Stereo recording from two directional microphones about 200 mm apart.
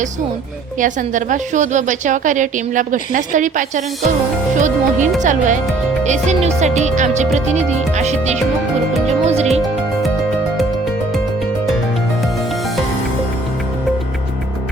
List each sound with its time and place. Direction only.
0.8 s a woman's voice: 40° right (ahead or behind)
12.2 s music: centre (ahead or behind)